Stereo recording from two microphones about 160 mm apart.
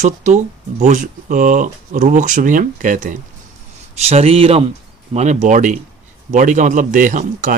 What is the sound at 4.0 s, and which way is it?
Speech, 40° right (ahead or behind).